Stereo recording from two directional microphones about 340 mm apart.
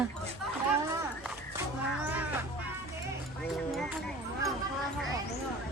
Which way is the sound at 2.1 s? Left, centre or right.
Centre.